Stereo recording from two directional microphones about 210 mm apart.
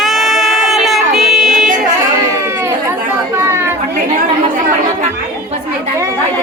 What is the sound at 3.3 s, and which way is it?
Chatter, 10° right (ahead or behind).